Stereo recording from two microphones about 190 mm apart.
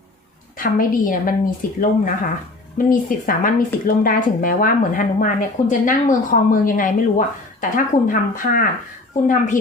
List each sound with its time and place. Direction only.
0.5 s speech: 45° left (ahead or behind)